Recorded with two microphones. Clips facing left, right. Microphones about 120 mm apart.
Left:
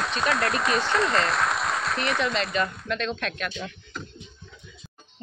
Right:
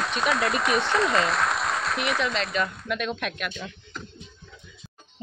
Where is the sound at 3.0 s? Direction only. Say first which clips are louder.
Even; 10° right (ahead or behind).